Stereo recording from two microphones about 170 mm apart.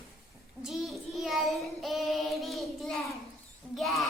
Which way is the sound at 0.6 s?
Centre (ahead or behind).